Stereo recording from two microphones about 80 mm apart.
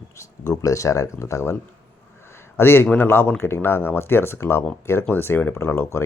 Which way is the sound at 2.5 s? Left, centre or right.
Left.